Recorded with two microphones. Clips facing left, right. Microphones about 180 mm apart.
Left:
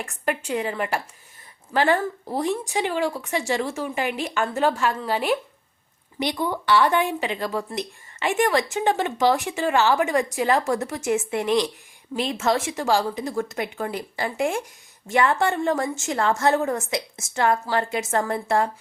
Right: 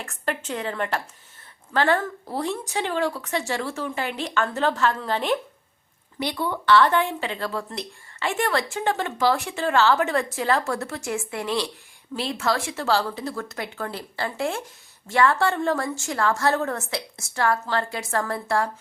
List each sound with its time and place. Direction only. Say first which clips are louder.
0.0 s a woman's voice: left 2 dB; 10° left (ahead or behind)